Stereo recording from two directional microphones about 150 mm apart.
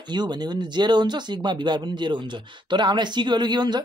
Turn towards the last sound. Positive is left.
turn(degrees=-30)  # may be behind; listen again after turning